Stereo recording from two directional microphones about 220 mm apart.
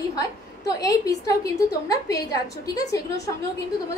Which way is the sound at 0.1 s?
15° left (ahead or behind).